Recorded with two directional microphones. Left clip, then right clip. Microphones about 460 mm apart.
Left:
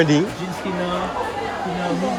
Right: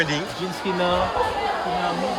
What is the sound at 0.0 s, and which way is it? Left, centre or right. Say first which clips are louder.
Speech: left 6 dB; centre.